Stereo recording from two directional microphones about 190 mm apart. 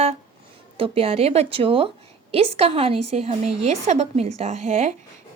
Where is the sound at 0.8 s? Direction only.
30° right (ahead or behind).